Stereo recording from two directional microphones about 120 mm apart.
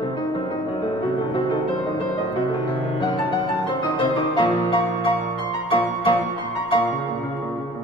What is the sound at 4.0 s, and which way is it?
Music, 40° left (ahead or behind).